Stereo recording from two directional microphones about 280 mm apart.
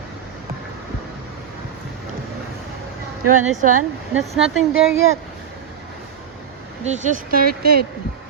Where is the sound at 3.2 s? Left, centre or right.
Right.